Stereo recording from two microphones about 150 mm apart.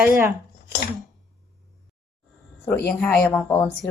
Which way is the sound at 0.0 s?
5° right (ahead or behind).